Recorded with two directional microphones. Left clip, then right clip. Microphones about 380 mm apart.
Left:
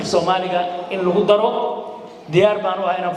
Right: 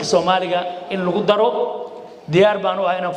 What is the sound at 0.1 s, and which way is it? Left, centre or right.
A man's voice, right.